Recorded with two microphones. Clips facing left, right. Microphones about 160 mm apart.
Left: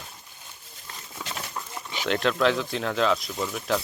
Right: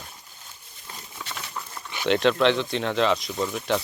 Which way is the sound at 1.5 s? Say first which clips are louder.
Left 1 dB; 15° left (ahead or behind).